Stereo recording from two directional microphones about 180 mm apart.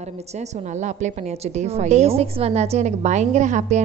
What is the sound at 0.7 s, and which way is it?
A woman's voice, 40° right (ahead or behind).